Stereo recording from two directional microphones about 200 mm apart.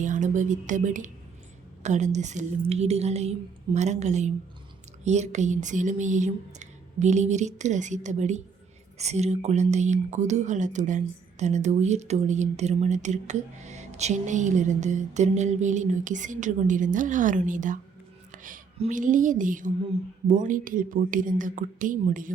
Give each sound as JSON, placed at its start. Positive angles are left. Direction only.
{"t": 0.0, "sound": "speech", "side_deg": -40}